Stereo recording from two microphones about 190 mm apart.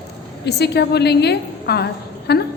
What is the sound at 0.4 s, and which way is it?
A woman's voice, 60° left (ahead or behind).